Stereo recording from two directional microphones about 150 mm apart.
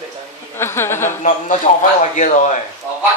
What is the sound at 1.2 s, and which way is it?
A man's voice, 60° left (ahead or behind).